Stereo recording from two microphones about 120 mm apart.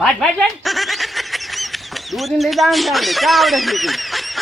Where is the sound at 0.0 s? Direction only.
Centre (ahead or behind).